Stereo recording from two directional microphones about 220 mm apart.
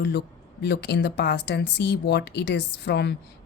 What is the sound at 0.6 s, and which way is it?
Speech, 50° left (ahead or behind).